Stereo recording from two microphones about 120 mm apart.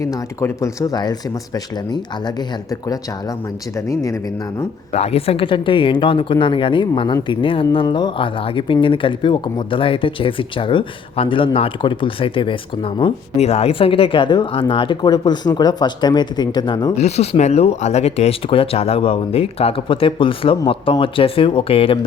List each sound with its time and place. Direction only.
0.0 s speech: 25° left (ahead or behind)
4.9 s speech: 60° left (ahead or behind); by 13.1 s 45° left (ahead or behind)
13.3 s speech: 65° left (ahead or behind); by 16.9 s 35° left (ahead or behind)
17.0 s speech: 65° left (ahead or behind)